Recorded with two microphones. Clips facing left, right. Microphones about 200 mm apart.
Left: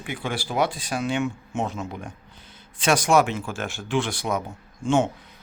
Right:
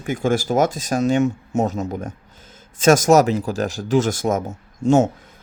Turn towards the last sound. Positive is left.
turn(degrees=-40)  # may be behind; listen again after turning